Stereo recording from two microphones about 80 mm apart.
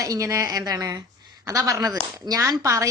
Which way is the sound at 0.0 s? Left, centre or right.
Right.